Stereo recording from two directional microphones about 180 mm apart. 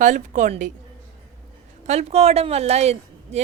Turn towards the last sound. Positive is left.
turn(degrees=-35)  # may be behind; listen again after turning